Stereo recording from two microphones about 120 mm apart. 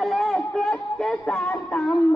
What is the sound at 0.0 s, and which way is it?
Music, centre (ahead or behind).